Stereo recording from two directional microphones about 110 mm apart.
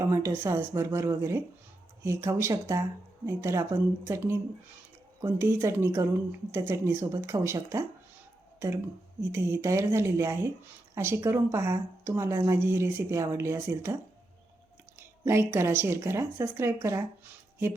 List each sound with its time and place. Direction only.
0.0 s a woman's voice: 25° right (ahead or behind)